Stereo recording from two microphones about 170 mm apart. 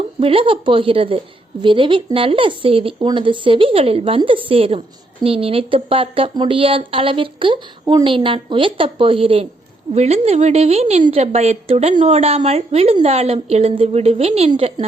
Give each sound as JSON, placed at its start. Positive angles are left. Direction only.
{"t": 0.2, "sound": "speech", "side_deg": -30}